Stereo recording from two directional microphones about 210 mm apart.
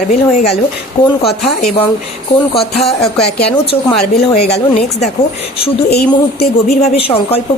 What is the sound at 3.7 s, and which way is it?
Speech, 25° left (ahead or behind).